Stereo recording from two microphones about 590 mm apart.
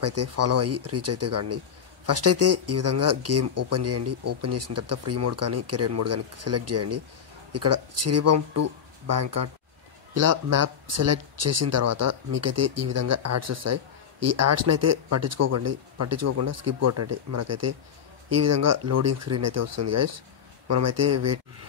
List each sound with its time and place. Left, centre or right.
0.0 s speech: right